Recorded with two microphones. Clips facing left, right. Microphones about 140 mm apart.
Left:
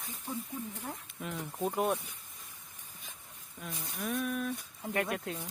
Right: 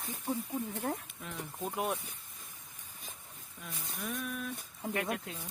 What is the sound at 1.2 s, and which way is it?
Speech, 5° left (ahead or behind).